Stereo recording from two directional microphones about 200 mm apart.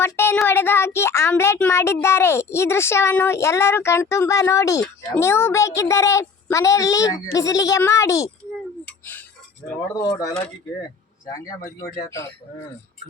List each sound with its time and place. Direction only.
0.0 s speech: 10° left (ahead or behind)
8.8 s a sound: 10° left (ahead or behind)
9.9 s speech: 20° left (ahead or behind)